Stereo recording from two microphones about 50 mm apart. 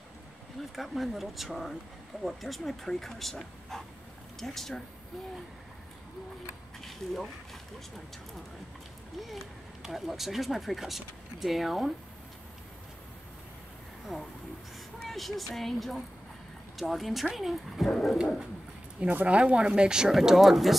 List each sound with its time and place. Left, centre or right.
0.6 s speech: centre
6.8 s speech: centre
9.8 s speech: centre
14.1 s speech: centre
19.2 s speech: right; by 20.7 s centre